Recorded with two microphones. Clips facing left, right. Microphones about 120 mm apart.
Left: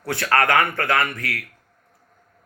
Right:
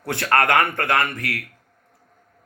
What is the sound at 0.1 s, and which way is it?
Speech, 25° right (ahead or behind).